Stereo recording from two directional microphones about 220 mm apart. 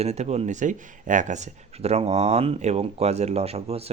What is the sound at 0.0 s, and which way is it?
Speech, 30° right (ahead or behind).